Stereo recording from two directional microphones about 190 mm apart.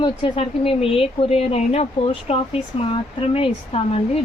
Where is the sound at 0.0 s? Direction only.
25° left (ahead or behind).